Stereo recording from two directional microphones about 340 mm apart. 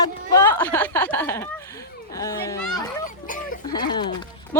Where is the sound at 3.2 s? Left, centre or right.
Left.